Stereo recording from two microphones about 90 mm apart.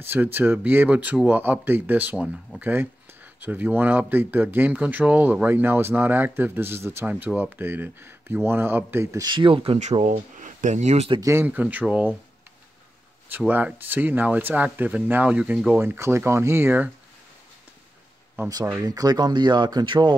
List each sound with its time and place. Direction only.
0.0 s speech: 20° right (ahead or behind)
9.2 s speech: 60° right (ahead or behind); by 10.2 s 85° right
11.1 s speech: 35° right (ahead or behind)
11.4 s speech: 15° right (ahead or behind)
13.5 s speech: 20° right (ahead or behind)
15.8 s speech: 25° right (ahead or behind)
18.4 s speech: 25° right (ahead or behind)
18.8 s speech: 45° right (ahead or behind)